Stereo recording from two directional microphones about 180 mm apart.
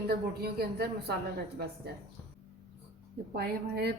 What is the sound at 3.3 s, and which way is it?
Speech, 65° right (ahead or behind).